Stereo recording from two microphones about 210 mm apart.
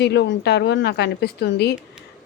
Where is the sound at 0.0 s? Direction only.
55° left (ahead or behind).